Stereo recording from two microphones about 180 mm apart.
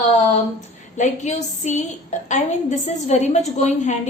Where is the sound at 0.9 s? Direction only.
40° left (ahead or behind).